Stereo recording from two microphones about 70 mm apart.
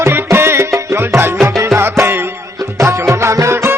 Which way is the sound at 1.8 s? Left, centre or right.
Right.